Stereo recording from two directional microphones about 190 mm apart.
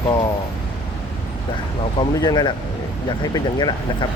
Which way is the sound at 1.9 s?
20° left (ahead or behind).